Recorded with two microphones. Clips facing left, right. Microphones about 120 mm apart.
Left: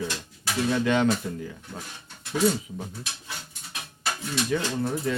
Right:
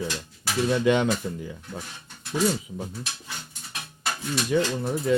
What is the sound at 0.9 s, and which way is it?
Speech, 15° right (ahead or behind).